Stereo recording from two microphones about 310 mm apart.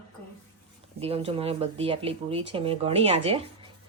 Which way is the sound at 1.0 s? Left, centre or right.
Centre.